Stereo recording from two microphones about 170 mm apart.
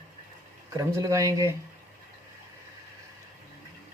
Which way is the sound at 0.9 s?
20° right (ahead or behind).